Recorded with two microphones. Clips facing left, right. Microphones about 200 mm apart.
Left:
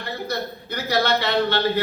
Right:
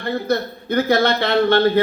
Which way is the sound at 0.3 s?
50° right (ahead or behind).